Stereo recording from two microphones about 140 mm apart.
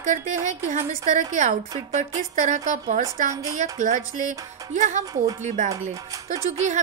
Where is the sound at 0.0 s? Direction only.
60° right (ahead or behind).